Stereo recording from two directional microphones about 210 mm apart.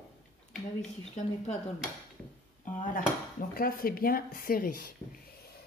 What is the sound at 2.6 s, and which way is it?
Dishes, 40° left (ahead or behind).